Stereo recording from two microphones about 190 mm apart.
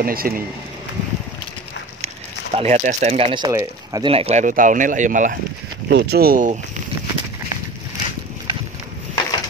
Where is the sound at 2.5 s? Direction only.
35° right (ahead or behind).